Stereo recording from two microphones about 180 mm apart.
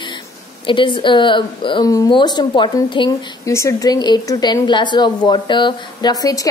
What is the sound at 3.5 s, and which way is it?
A woman's voice, 15° left (ahead or behind).